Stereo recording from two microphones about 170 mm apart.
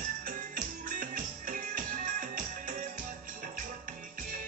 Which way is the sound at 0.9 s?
50° right (ahead or behind).